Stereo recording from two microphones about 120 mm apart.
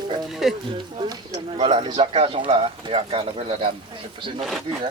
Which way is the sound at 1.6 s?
45° right (ahead or behind).